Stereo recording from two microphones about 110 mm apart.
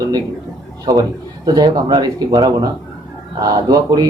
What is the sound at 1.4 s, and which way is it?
Speech, 35° right (ahead or behind).